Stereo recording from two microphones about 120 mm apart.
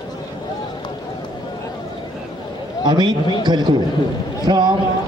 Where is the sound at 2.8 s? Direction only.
40° right (ahead or behind).